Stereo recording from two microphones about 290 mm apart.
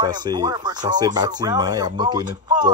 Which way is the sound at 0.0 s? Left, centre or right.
Centre.